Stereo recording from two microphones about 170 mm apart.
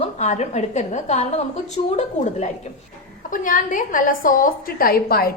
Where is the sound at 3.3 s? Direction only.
50° left (ahead or behind).